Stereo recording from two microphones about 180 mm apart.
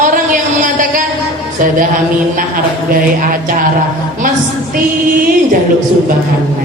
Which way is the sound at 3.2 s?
50° right (ahead or behind).